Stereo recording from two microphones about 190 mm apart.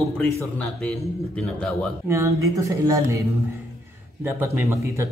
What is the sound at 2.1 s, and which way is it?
Speech, 15° right (ahead or behind).